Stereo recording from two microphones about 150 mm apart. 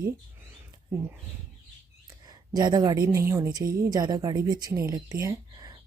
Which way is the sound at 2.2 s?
25° right (ahead or behind).